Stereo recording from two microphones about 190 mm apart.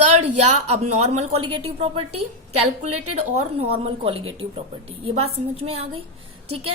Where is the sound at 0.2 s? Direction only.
35° right (ahead or behind).